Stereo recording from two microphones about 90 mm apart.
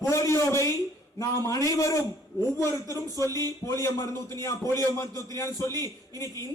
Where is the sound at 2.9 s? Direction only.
40° right (ahead or behind).